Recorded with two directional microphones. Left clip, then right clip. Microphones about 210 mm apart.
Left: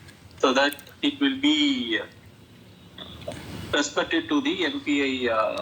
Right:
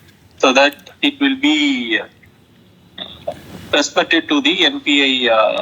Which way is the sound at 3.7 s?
70° right (ahead or behind).